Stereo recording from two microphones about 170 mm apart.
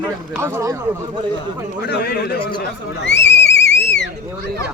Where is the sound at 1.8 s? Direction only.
70° left (ahead or behind).